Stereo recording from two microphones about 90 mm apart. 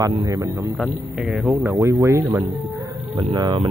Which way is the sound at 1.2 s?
5° right (ahead or behind).